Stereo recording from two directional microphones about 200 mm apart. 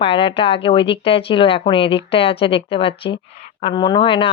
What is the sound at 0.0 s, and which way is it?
Speech, 25° left (ahead or behind).